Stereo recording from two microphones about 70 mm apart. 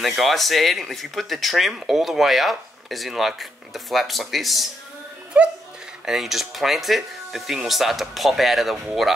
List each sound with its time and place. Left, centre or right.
0.0 s speech: centre
5.4 s speech: centre
6.0 s speech: centre